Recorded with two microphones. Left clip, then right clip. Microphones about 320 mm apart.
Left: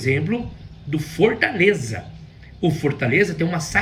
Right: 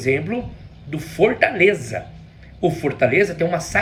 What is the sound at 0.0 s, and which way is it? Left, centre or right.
A man's voice, centre.